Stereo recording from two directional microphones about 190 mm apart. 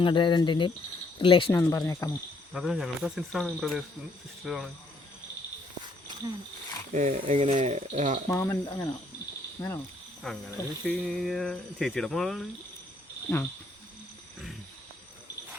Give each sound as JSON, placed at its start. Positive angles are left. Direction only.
{"t": 0.0, "sound": "speech", "side_deg": 25}
{"t": 1.5, "sound": "speech", "side_deg": 10}
{"t": 2.5, "sound": "speech", "side_deg": 0}
{"t": 6.9, "sound": "speech", "side_deg": -40}
{"t": 8.3, "sound": "speech", "side_deg": 15}
{"t": 10.3, "sound": "speech", "side_deg": 0}